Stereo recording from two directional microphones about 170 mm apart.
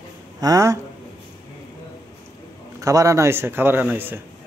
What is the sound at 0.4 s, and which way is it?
Speech, 20° right (ahead or behind).